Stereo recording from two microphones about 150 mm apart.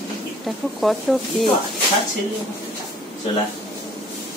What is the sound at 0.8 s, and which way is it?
Speech, centre (ahead or behind).